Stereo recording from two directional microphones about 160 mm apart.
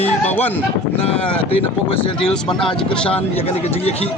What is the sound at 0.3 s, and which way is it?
Speech, 10° left (ahead or behind).